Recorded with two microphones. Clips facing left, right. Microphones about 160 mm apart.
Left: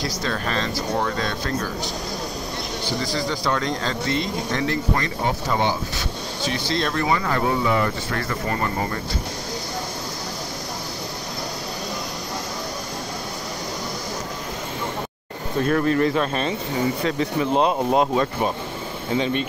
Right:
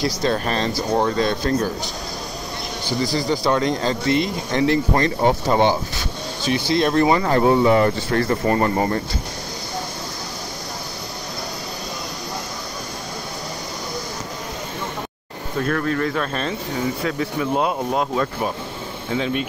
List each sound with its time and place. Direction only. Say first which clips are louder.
0.2 s speech: right 3 dB; 30° right (ahead or behind)
3.3 s speech: right 6 dB; 20° right (ahead or behind)
4.9 s speech: right 6 dB; 35° right (ahead or behind)
6.5 s speech: right 7 dB; 15° right (ahead or behind)
6.9 s speech: right 7 dB; 30° right (ahead or behind)
15.6 s speech: left 3 dB; 5° left (ahead or behind)